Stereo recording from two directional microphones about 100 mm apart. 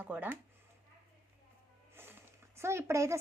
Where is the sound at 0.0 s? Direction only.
15° right (ahead or behind).